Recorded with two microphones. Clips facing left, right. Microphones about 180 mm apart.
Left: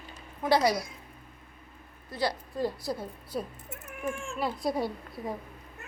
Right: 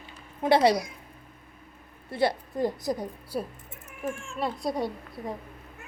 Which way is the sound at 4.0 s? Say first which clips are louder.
Right 1 dB; centre (ahead or behind).